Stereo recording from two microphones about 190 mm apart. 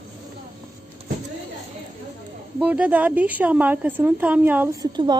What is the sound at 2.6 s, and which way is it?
A woman's voice, 10° right (ahead or behind).